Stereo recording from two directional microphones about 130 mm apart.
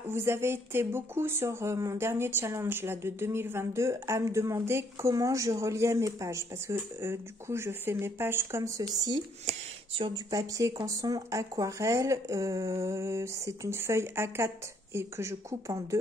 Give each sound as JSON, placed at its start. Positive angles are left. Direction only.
{"t": 0.1, "sound": "speech", "side_deg": -20}
{"t": 9.5, "sound": "speech", "side_deg": -45}
{"t": 10.3, "sound": "speech", "side_deg": -25}